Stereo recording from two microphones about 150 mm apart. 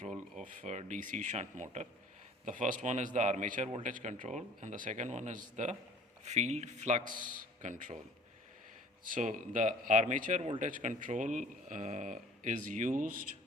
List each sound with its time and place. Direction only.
0.0 s speech: 50° right (ahead or behind)
9.0 s speech: 65° right (ahead or behind)